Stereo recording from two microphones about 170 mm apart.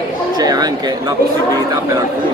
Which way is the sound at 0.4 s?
25° right (ahead or behind).